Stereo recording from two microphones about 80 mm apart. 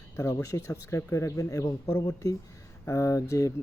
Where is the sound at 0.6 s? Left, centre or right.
Left.